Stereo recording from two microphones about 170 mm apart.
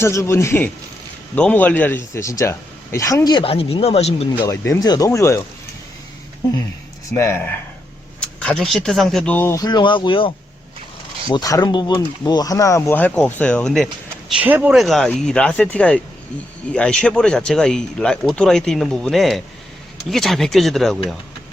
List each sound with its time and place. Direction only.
0.0 s speech: 15° left (ahead or behind); by 4.3 s 35° left (ahead or behind)
4.3 s speech: 15° left (ahead or behind)
7.1 s speech: 15° left (ahead or behind)
14.3 s speech: 10° right (ahead or behind)